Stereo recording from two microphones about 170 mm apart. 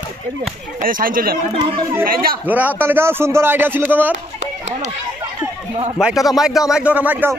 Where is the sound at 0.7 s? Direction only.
55° right (ahead or behind).